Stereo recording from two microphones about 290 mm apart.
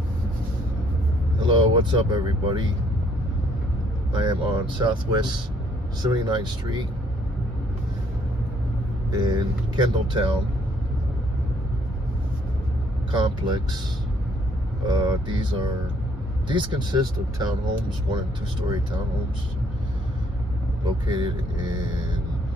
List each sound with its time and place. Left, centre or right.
1.4 s speech: centre
4.1 s speech: centre
9.1 s speech: centre
13.1 s speech: centre
14.9 s speech: centre
21.7 s speech: centre